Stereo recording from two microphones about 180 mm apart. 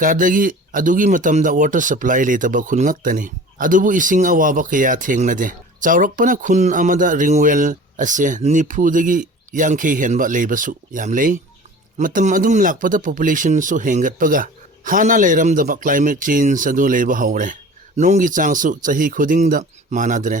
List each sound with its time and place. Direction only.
0.0 s speech: 50° right (ahead or behind)